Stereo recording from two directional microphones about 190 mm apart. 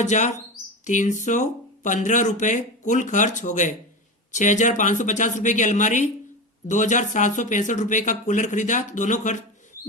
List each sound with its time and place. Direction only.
0.0 s speech: 40° left (ahead or behind)